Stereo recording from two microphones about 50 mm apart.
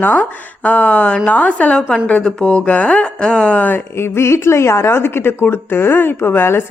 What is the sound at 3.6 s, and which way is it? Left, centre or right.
Speech, left.